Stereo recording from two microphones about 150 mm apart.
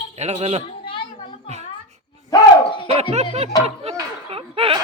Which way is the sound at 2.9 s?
45° right (ahead or behind).